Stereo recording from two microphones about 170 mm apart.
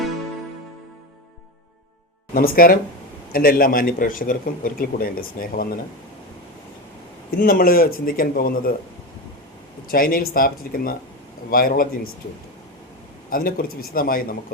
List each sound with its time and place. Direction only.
2.3 s a man's voice: 60° left (ahead or behind)
7.3 s a man's voice: 55° left (ahead or behind)
9.9 s a man's voice: 60° left (ahead or behind)
13.3 s a man's voice: 60° left (ahead or behind)